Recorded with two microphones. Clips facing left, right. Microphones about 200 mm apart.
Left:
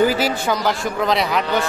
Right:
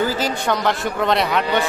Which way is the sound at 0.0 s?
15° left (ahead or behind).